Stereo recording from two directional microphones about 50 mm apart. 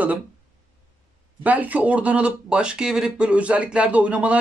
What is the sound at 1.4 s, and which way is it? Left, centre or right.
Speech, right.